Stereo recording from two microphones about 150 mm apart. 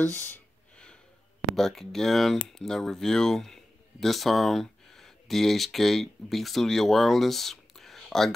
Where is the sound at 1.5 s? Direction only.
Centre (ahead or behind).